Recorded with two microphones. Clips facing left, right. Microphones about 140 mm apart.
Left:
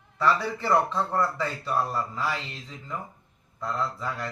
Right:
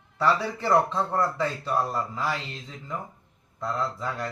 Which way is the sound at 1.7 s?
15° right (ahead or behind).